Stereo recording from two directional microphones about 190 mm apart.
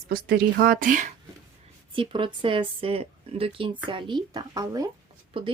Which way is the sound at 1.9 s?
25° right (ahead or behind).